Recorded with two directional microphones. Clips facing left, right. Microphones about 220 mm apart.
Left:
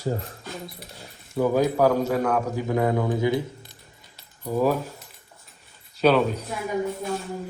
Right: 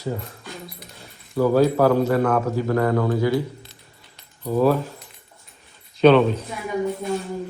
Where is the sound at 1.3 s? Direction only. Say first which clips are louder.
Right 4 dB; 15° left (ahead or behind).